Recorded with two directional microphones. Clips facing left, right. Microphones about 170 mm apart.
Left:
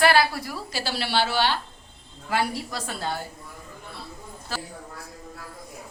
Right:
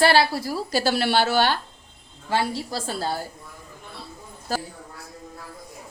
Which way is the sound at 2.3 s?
30° right (ahead or behind).